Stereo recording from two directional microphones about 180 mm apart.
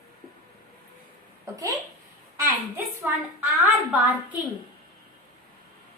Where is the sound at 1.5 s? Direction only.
20° right (ahead or behind).